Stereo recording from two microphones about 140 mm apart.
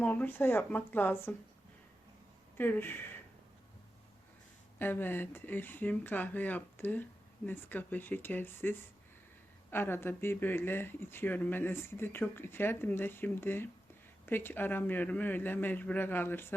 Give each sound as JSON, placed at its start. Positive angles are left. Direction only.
{"t": 0.0, "sound": "speech", "side_deg": 10}
{"t": 2.6, "sound": "speech", "side_deg": 15}
{"t": 4.8, "sound": "speech", "side_deg": 15}